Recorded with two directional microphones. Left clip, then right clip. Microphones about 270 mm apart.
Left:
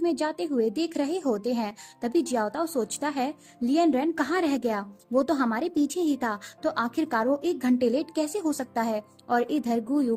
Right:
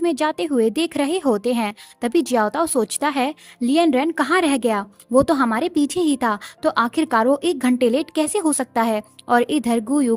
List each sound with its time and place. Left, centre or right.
0.0 s a woman's voice: right